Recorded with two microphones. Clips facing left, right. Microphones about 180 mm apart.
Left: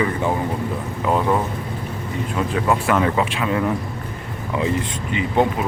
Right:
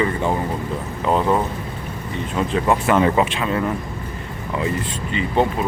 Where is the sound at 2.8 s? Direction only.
20° right (ahead or behind).